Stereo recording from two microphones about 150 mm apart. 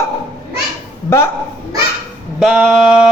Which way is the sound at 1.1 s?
15° left (ahead or behind).